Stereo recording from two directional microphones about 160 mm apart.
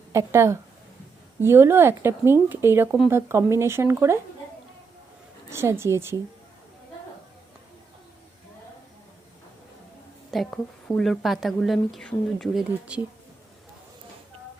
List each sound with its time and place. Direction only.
0.1 s speech: 20° right (ahead or behind)
5.5 s speech: 15° right (ahead or behind)
10.3 s a woman's voice: centre (ahead or behind)